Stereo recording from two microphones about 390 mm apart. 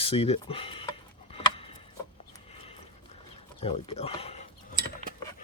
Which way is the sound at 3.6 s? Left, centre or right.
Centre.